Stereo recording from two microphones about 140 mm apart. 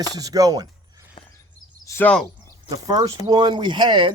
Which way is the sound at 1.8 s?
20° left (ahead or behind).